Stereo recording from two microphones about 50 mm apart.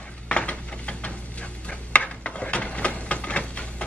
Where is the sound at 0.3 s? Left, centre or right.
Left.